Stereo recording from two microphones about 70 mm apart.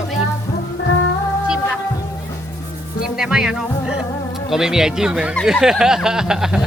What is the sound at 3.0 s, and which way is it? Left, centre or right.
Music, centre.